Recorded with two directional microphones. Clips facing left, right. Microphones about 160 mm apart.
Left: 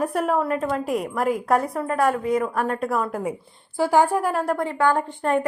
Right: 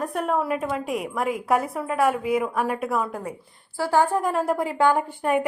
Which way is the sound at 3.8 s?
15° left (ahead or behind).